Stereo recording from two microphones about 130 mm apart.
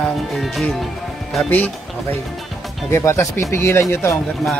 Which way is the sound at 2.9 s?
20° left (ahead or behind).